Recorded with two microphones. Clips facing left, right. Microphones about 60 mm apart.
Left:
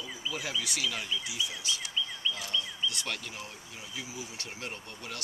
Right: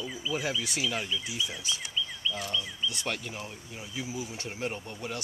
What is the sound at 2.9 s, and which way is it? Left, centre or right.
Speech, right.